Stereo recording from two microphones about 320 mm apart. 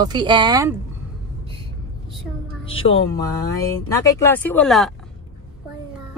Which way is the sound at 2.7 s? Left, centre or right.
Centre.